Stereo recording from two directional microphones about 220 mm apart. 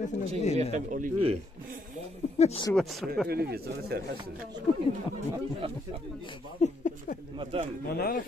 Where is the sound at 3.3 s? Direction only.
45° right (ahead or behind).